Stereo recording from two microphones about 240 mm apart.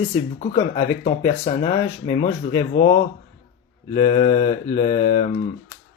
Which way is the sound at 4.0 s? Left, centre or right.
Left.